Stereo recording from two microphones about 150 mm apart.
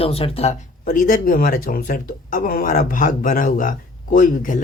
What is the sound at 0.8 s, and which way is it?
Speech, 65° left (ahead or behind).